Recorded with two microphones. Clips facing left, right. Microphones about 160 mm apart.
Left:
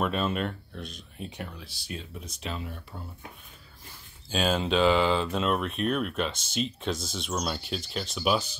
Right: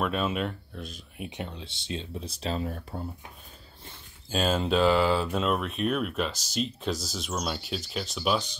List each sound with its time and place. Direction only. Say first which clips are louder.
0.0 s speech: even; centre (ahead or behind); by 3.0 s 40° right (ahead or behind)
4.3 s speech: right 1 dB; centre (ahead or behind)